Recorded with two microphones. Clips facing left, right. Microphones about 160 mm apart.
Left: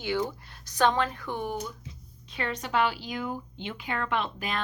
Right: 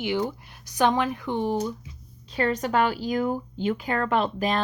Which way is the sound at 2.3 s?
40° right (ahead or behind).